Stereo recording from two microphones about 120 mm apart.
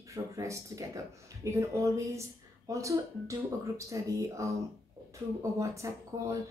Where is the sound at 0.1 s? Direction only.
25° right (ahead or behind).